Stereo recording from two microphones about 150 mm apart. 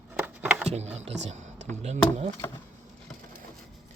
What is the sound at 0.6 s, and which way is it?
Speech, 45° right (ahead or behind).